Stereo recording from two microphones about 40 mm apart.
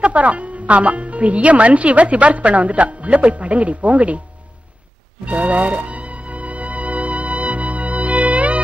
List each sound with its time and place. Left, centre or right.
0.0 s speech: right
5.2 s music: right